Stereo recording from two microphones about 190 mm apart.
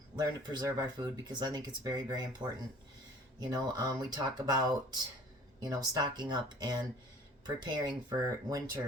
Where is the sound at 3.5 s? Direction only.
20° right (ahead or behind).